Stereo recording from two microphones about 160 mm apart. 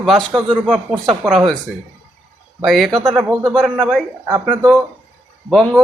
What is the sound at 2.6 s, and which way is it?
Speech, centre (ahead or behind).